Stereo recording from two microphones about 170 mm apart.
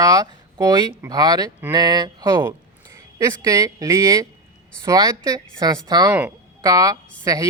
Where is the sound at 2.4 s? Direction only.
15° right (ahead or behind).